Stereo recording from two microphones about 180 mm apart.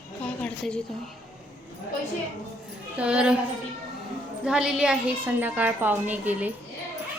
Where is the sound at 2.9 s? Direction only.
5° right (ahead or behind).